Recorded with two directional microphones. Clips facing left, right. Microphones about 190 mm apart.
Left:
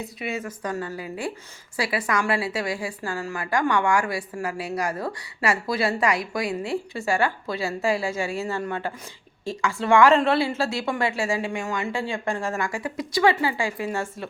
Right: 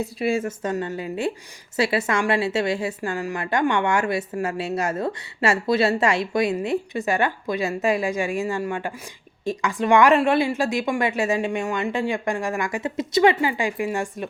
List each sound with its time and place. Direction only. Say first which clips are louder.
0.2 s a woman's voice: right 7 dB; 30° right (ahead or behind)